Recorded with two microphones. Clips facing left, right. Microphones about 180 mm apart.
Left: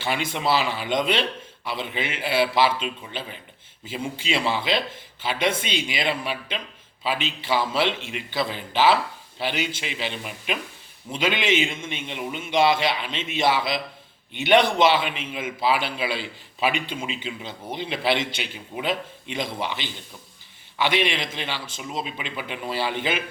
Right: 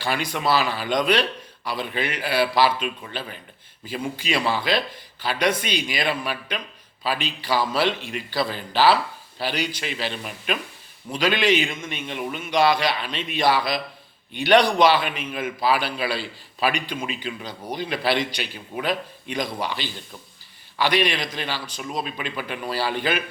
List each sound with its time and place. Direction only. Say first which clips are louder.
0.0 s a man's voice: right 1 dB; 25° left (ahead or behind)